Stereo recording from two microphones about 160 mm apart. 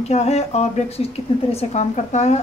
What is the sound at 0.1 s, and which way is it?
A woman's voice, 45° left (ahead or behind).